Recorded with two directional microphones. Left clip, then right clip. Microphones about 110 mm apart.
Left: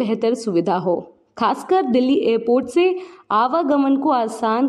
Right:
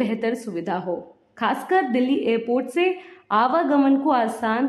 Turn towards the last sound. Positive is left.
turn(degrees=50)  # may be behind; listen again after turning